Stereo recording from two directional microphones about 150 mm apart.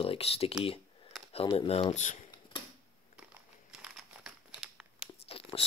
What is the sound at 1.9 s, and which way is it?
Speech, 50° left (ahead or behind).